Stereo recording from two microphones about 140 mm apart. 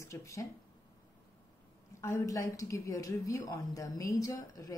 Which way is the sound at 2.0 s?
20° left (ahead or behind).